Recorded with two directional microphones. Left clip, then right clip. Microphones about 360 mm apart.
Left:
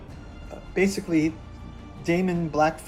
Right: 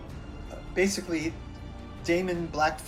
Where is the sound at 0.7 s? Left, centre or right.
Left.